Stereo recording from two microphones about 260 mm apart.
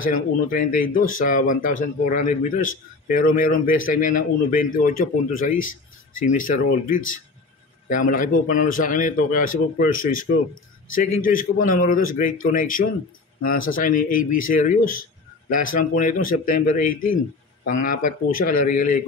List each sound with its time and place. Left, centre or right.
0.0 s speech: left